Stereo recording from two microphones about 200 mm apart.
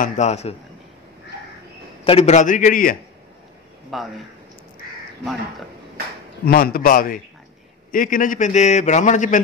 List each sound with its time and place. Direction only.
0.0 s a man's voice: 35° left (ahead or behind)
2.0 s a man's voice: 30° left (ahead or behind)
3.9 s a man's voice: centre (ahead or behind)
6.4 s a man's voice: 45° left (ahead or behind)